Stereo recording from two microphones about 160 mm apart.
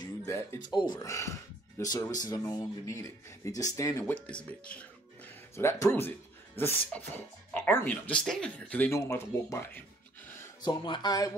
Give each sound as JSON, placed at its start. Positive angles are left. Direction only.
{"t": 0.0, "sound": "music", "side_deg": 20}
{"t": 0.7, "sound": "speech", "side_deg": 25}
{"t": 4.0, "sound": "speech", "side_deg": 5}
{"t": 10.6, "sound": "speech", "side_deg": 25}